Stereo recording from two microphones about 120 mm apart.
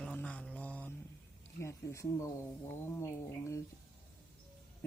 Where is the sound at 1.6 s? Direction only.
25° left (ahead or behind).